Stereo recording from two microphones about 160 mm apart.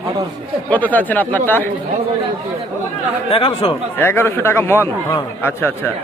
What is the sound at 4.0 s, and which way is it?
A man's voice, 15° left (ahead or behind).